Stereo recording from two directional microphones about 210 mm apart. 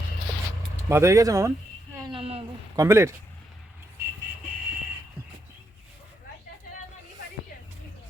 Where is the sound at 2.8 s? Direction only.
15° right (ahead or behind).